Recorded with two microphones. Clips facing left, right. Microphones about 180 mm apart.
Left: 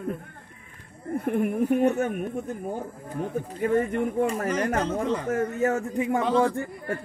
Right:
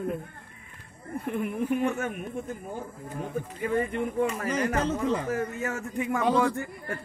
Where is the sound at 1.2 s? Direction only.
50° left (ahead or behind).